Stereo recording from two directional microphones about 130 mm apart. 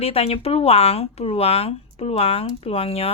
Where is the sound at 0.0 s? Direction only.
50° left (ahead or behind).